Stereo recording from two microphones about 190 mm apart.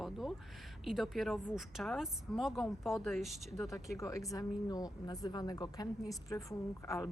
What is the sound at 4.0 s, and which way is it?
Speech, 15° left (ahead or behind).